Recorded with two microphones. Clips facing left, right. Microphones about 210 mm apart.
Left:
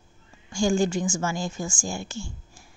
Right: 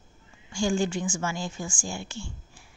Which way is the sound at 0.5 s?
45° left (ahead or behind).